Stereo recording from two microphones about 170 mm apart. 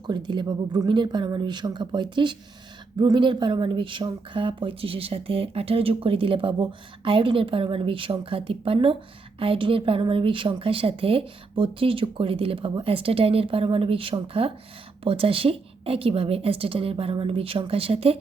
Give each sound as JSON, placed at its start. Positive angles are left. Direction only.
{"t": 0.1, "sound": "speech", "side_deg": -25}